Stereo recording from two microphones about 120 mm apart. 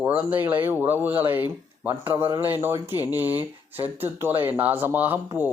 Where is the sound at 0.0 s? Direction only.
15° right (ahead or behind).